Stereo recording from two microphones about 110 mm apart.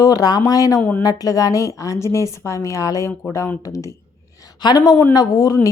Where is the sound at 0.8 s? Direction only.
15° left (ahead or behind).